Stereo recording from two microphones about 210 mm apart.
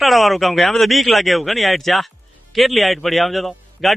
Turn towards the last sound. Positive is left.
turn(degrees=0)  # may be behind; listen again after turning